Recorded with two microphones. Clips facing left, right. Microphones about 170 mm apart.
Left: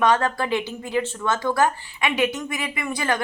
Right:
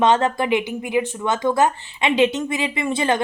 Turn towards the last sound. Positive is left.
turn(degrees=-25)  # may be behind; listen again after turning